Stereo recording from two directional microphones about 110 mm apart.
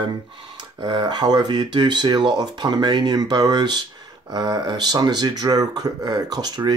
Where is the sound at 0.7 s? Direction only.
45° right (ahead or behind).